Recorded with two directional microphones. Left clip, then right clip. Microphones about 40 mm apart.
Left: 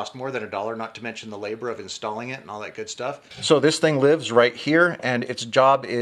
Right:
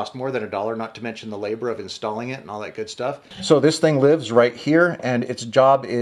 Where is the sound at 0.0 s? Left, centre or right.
Centre.